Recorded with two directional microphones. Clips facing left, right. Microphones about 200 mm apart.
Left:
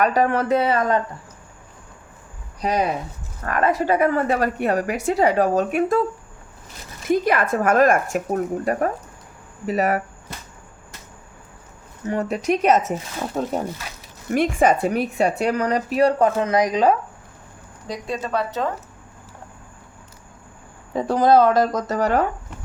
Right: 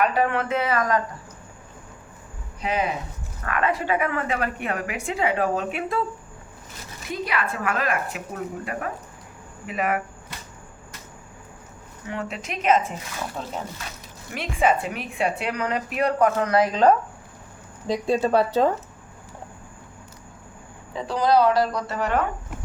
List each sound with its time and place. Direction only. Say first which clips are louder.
0.0 s speech: left 3 dB; 40° left (ahead or behind)
2.6 s speech: left 4 dB; 40° left (ahead or behind)
7.1 s a woman's voice: left 9 dB; 45° left (ahead or behind)
12.0 s speech: left 10 dB; 40° left (ahead or behind); by 16.9 s 15° left (ahead or behind)
17.8 s speech: right 6 dB; 30° right (ahead or behind)
20.9 s a woman's voice: left 4 dB; 50° left (ahead or behind)